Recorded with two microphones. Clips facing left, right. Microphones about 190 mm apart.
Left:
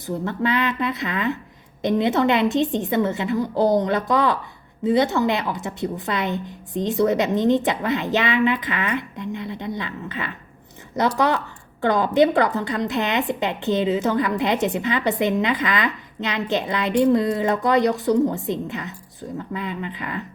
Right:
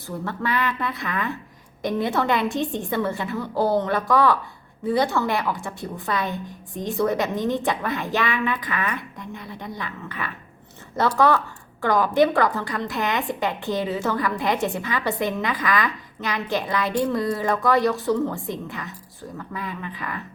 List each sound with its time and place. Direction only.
0.0 s a woman's voice: 20° left (ahead or behind)